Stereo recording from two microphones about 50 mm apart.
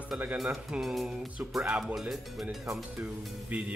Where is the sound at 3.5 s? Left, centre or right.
Right.